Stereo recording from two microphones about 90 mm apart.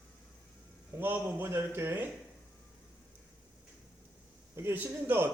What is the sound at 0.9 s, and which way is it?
A man's voice, 20° right (ahead or behind).